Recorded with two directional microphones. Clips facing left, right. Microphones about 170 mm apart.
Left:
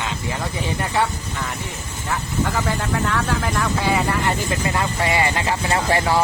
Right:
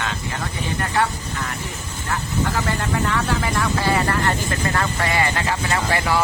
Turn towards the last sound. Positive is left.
turn(degrees=30)  # may be behind; listen again after turning